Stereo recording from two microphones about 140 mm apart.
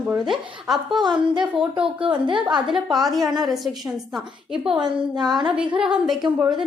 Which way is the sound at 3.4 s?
Centre (ahead or behind).